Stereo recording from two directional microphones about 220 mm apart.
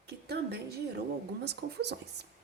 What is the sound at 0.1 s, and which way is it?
A woman's voice, 45° right (ahead or behind).